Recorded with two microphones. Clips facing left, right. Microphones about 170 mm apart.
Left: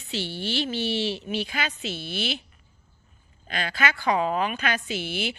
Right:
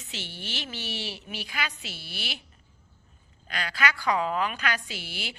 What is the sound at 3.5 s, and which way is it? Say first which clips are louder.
A woman's voice: left 2 dB; 25° left (ahead or behind).